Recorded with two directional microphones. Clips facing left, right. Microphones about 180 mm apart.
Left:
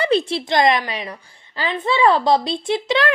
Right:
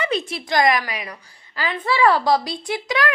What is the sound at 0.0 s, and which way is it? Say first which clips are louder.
A woman's voice: left 6 dB; 30° left (ahead or behind).